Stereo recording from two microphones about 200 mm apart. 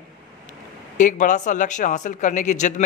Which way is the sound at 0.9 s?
40° left (ahead or behind).